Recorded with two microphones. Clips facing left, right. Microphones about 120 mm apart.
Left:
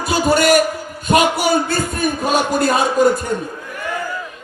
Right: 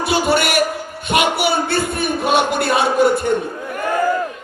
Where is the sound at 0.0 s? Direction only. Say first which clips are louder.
Left 1 dB; 40° left (ahead or behind).